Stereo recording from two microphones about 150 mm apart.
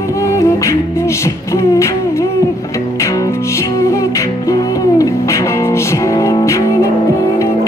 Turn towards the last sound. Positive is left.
turn(degrees=25)  # may be behind; listen again after turning